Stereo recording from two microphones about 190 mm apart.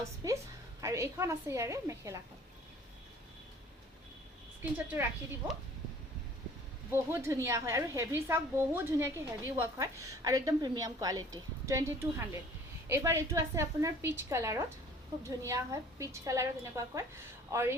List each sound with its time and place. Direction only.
0.2 s a woman's voice: 20° right (ahead or behind)
4.6 s a woman's voice: 10° right (ahead or behind)
6.9 s a woman's voice: 15° right (ahead or behind)